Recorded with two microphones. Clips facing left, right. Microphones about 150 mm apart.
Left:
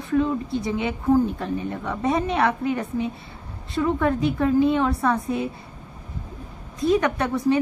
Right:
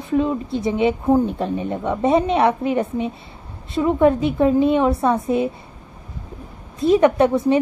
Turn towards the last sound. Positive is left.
turn(degrees=-25)  # may be behind; listen again after turning